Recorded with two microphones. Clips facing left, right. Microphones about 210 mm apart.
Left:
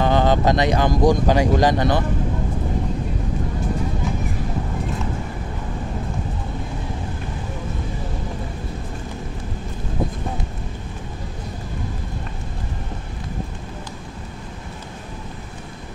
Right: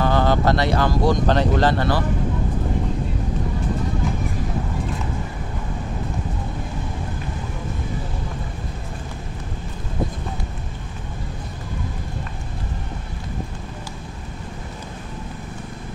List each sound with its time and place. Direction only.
0.0 s speech: 20° left (ahead or behind)